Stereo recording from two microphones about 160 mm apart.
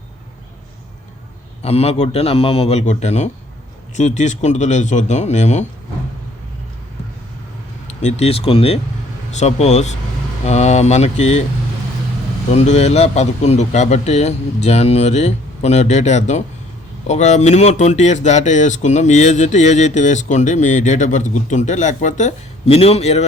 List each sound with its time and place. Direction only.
1.6 s a man's voice: 40° left (ahead or behind)
8.0 s a man's voice: 40° left (ahead or behind)
12.5 s speech: 45° left (ahead or behind)